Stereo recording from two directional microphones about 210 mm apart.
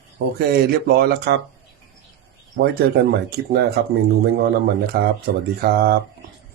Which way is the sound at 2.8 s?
50° right (ahead or behind).